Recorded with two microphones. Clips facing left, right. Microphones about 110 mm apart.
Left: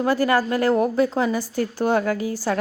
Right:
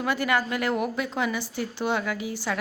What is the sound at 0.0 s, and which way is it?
A woman's voice, 35° left (ahead or behind).